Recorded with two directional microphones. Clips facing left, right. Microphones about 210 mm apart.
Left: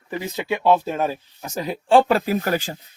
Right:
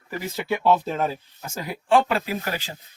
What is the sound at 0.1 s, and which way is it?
Speech, 15° left (ahead or behind).